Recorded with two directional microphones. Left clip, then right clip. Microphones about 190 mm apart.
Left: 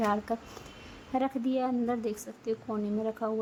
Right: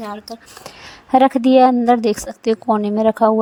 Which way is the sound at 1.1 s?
50° right (ahead or behind).